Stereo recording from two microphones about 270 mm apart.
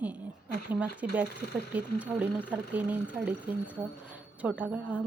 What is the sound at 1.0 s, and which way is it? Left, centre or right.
A woman's voice, centre.